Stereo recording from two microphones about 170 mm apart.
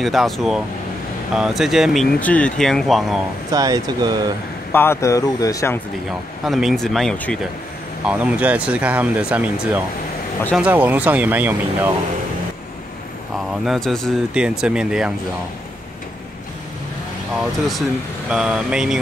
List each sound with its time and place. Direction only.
0.0 s speech: centre (ahead or behind)
3.5 s speech: 20° right (ahead or behind)
4.7 s speech: 15° left (ahead or behind)
6.4 s speech: centre (ahead or behind)
8.1 s speech: 5° right (ahead or behind)
13.7 s speech: centre (ahead or behind)
17.4 s speech: centre (ahead or behind)